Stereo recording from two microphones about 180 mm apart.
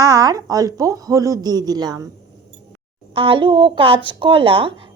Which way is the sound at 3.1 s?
30° right (ahead or behind).